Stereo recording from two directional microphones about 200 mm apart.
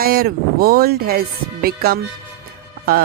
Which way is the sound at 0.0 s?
50° right (ahead or behind).